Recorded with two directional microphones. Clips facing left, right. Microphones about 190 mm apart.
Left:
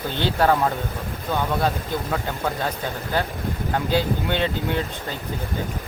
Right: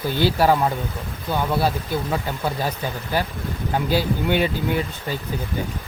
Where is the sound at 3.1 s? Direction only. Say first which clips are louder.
Even; 10° right (ahead or behind).